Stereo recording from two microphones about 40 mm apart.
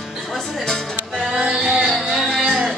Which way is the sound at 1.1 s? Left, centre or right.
Centre.